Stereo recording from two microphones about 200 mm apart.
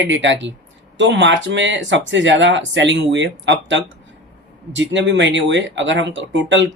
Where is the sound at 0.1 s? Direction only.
65° right (ahead or behind).